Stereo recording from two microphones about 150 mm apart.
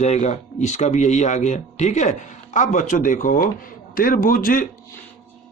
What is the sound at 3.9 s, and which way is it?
Speech, 70° left (ahead or behind).